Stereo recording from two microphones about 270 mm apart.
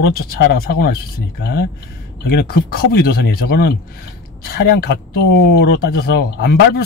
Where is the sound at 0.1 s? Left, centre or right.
Left.